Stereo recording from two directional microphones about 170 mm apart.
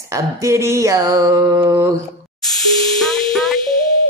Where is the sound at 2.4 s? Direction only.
Centre (ahead or behind).